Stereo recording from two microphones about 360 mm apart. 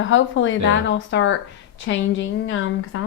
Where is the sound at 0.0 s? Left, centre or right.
Left.